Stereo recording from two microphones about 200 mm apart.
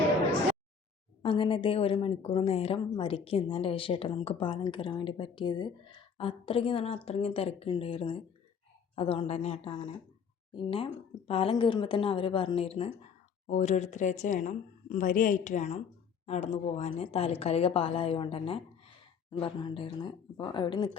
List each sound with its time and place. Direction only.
1.2 s a woman's voice: 25° left (ahead or behind)